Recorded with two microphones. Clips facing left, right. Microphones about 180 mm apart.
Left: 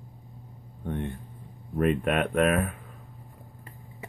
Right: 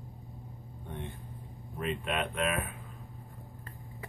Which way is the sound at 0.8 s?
60° left (ahead or behind).